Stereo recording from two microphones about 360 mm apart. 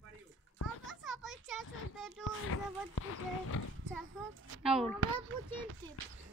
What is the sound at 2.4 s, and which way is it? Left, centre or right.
Speech, left.